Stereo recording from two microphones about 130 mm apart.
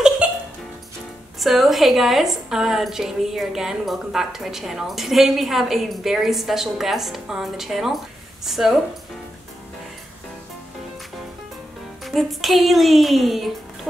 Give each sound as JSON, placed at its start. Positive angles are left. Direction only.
{"t": 0.2, "sound": "music", "side_deg": -10}
{"t": 1.4, "sound": "a woman's voice", "side_deg": 0}
{"t": 12.0, "sound": "a woman's voice", "side_deg": 0}